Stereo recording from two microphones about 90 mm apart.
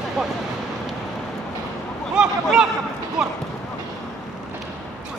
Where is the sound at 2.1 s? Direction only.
10° right (ahead or behind).